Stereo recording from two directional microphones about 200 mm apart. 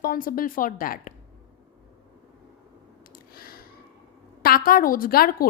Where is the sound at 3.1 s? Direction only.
45° left (ahead or behind).